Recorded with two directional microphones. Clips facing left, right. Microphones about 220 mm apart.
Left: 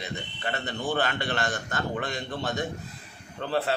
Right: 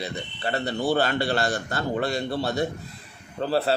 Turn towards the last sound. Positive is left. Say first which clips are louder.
# right 6 dB
turn(degrees=-35)  # may be behind; listen again after turning